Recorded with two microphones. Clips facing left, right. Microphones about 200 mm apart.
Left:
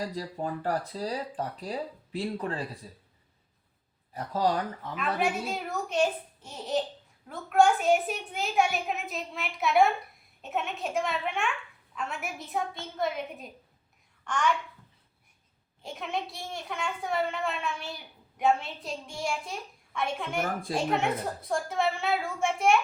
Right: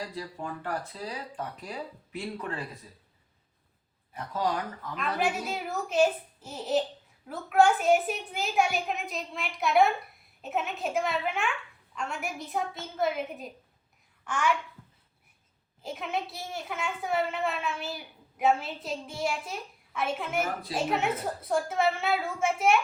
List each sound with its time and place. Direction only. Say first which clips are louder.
0.0 s speech: left 4 dB; 40° left (ahead or behind)
4.1 s speech: left 3 dB; 35° left (ahead or behind)
4.9 s a woman's voice: even; centre (ahead or behind)
15.8 s a woman's voice: right 1 dB; centre (ahead or behind)